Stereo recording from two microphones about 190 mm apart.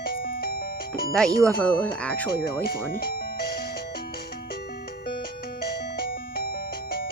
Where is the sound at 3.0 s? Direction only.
50° left (ahead or behind).